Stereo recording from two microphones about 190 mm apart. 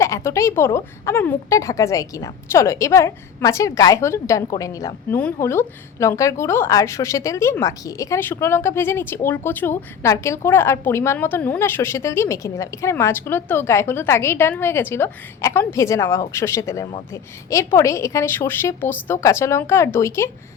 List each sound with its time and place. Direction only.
0.0 s a woman's voice: 15° left (ahead or behind)